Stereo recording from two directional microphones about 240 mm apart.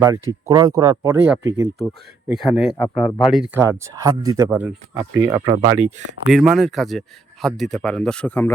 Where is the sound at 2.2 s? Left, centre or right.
Centre.